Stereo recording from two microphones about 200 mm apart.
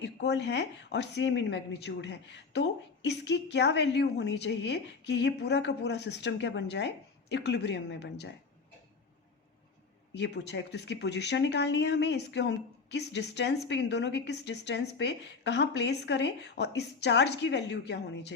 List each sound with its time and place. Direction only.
0.0 s speech: 60° left (ahead or behind)
10.2 s speech: 60° left (ahead or behind)